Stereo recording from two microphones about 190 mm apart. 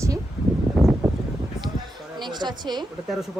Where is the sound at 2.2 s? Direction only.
25° right (ahead or behind).